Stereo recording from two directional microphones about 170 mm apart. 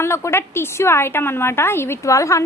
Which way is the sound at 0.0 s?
15° left (ahead or behind).